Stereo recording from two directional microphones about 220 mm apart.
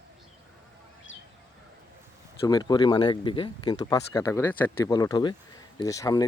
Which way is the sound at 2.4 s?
20° left (ahead or behind).